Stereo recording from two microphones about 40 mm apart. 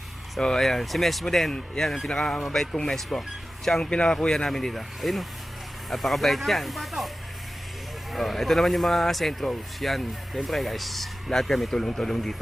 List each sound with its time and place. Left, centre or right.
0.3 s speech: centre
0.6 s speech: centre
2.0 s speech: centre
2.4 s speech: centre
3.8 s speech: left
4.4 s speech: centre
8.1 s speech: centre